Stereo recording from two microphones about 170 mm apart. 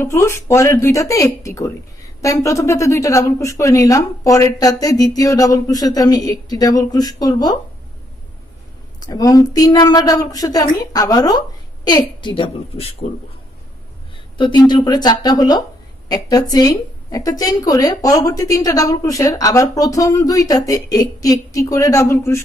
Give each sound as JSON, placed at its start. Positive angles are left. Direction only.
{"t": 0.0, "sound": "a woman's voice", "side_deg": 15}
{"t": 9.0, "sound": "a woman's voice", "side_deg": 20}
{"t": 14.3, "sound": "a woman's voice", "side_deg": 25}